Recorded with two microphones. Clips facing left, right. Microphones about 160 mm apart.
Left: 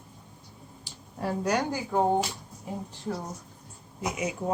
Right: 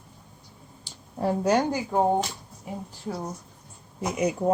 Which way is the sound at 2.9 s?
5° right (ahead or behind).